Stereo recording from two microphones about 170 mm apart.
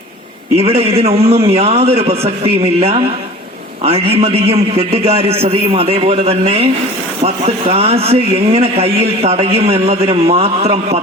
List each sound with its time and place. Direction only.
0.5 s a man's voice: 35° right (ahead or behind)